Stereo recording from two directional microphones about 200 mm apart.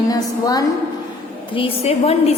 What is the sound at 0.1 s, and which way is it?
Speech, 20° left (ahead or behind).